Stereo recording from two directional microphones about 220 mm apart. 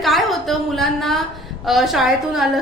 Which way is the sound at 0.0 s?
Centre (ahead or behind).